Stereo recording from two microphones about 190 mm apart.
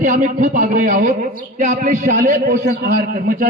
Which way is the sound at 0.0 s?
45° right (ahead or behind).